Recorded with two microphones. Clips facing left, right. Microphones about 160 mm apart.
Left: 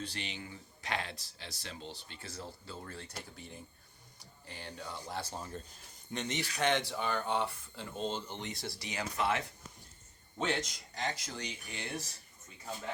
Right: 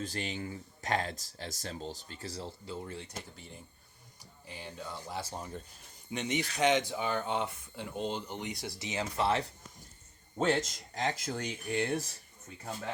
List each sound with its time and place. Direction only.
0.0 s speech: 45° right (ahead or behind)
2.6 s speech: 20° right (ahead or behind)
4.4 s speech: 5° right (ahead or behind); by 9.5 s 30° right (ahead or behind)
10.3 s speech: 45° right (ahead or behind)